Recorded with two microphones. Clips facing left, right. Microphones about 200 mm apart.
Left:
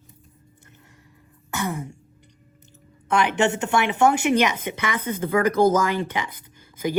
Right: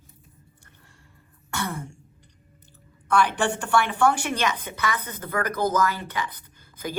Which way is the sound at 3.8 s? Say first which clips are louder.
Left 4 dB; 15° left (ahead or behind).